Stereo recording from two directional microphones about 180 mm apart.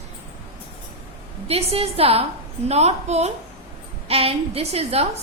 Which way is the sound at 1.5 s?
35° right (ahead or behind).